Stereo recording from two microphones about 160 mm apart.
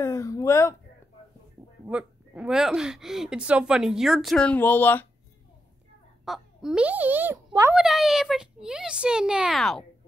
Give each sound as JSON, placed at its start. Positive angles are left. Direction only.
{"t": 0.0, "sound": "speech", "side_deg": 20}
{"t": 1.9, "sound": "speech", "side_deg": -5}
{"t": 6.2, "sound": "a child's voice", "side_deg": 0}